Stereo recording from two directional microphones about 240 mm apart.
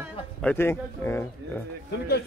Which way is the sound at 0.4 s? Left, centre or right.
Centre.